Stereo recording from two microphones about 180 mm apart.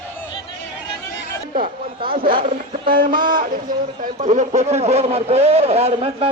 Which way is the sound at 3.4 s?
50° right (ahead or behind).